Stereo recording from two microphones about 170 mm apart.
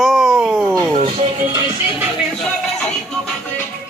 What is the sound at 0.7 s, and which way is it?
Speech, 20° right (ahead or behind).